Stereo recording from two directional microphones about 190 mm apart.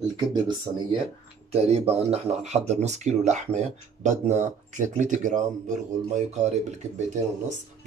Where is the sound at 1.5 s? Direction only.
35° right (ahead or behind).